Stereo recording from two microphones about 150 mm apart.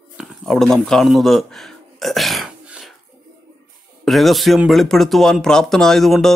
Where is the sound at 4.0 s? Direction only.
Centre (ahead or behind).